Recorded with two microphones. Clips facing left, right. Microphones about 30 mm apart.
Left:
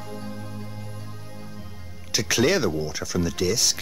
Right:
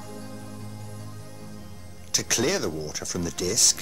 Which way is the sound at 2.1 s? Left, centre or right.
Centre.